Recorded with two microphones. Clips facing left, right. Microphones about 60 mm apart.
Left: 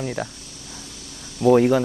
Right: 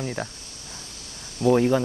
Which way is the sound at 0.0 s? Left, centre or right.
Centre.